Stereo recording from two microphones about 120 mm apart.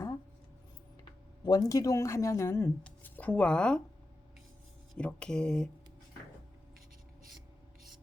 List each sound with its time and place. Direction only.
1.5 s a woman's voice: 30° left (ahead or behind); by 3.8 s 10° left (ahead or behind)
4.9 s speech: 10° left (ahead or behind)